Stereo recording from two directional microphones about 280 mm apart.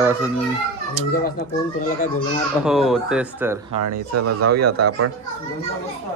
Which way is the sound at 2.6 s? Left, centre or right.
Centre.